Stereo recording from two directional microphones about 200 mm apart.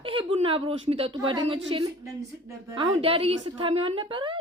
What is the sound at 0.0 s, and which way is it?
A woman's voice, 25° right (ahead or behind).